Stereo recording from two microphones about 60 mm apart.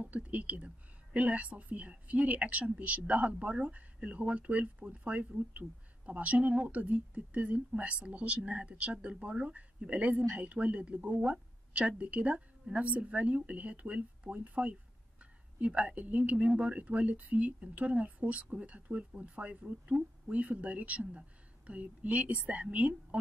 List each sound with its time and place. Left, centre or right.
0.0 s speech: right